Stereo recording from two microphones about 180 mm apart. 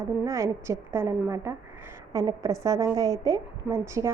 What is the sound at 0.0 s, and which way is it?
A woman's voice, 15° right (ahead or behind).